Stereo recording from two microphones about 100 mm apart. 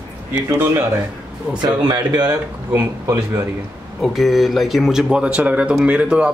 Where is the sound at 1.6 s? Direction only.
45° right (ahead or behind).